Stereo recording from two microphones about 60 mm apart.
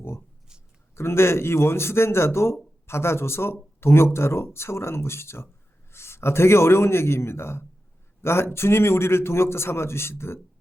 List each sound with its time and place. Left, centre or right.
0.9 s a man's voice: left